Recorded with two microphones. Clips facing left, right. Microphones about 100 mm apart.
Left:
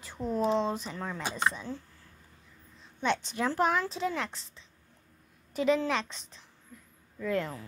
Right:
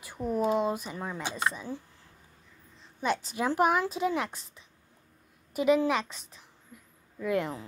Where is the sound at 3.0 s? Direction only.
5° right (ahead or behind).